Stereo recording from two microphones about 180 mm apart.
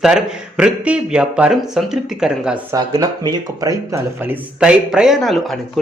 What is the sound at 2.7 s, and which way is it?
Speech, 20° right (ahead or behind).